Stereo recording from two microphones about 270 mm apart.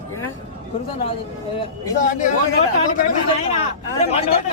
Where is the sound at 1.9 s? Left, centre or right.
Left.